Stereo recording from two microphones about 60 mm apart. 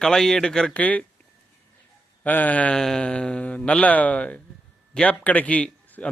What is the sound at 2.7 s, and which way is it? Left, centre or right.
Speech, centre.